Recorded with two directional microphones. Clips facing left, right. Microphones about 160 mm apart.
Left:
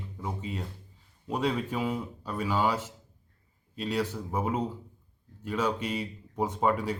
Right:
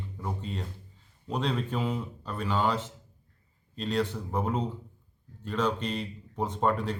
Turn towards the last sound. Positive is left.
turn(degrees=10)  # may be behind; listen again after turning